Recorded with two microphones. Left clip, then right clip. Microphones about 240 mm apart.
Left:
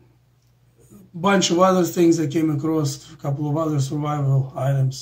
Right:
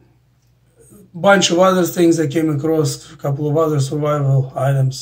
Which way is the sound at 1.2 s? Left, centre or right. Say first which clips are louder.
Right 5 dB; centre.